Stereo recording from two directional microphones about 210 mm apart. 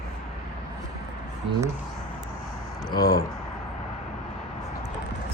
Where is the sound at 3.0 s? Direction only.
45° left (ahead or behind).